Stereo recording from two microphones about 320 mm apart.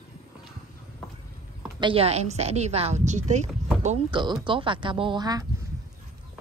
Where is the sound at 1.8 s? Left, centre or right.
Centre.